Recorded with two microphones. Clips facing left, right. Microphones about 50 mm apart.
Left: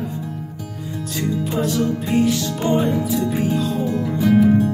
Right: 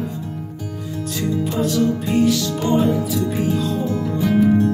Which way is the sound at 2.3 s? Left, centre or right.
Left.